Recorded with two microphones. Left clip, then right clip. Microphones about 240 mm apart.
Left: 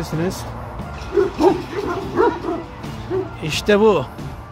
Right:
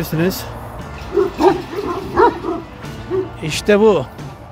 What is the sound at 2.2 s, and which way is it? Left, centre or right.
Bow-wow, right.